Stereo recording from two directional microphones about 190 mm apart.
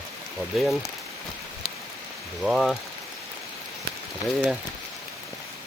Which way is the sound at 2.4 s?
Centre (ahead or behind).